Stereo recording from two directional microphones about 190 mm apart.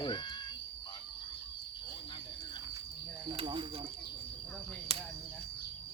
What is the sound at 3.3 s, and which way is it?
Speech, 25° right (ahead or behind).